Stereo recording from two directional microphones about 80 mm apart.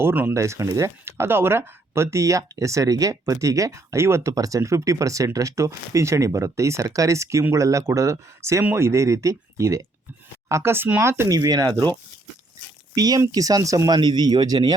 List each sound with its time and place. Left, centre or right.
0.0 s speech: right
0.3 s speech: right
11.3 s speech: right
12.9 s speech: right
13.9 s speech: right